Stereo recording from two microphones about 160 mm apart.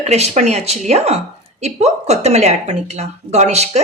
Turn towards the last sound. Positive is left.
turn(degrees=-45)  # may be behind; listen again after turning